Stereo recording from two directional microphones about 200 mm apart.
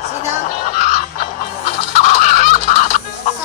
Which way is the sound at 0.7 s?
35° left (ahead or behind).